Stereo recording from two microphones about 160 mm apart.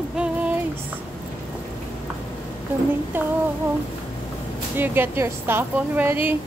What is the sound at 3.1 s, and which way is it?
Speech, 10° right (ahead or behind).